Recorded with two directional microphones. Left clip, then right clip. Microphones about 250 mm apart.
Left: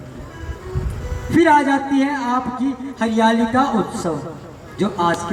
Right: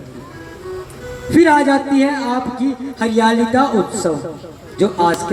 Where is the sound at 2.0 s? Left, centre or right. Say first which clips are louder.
Right 2 dB; right.